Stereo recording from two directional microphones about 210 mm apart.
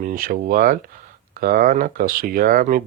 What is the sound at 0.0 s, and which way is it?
Speech, 40° right (ahead or behind).